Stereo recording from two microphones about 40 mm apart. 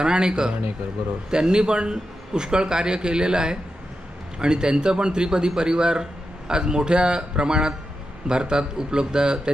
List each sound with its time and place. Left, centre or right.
0.0 s a man's voice: right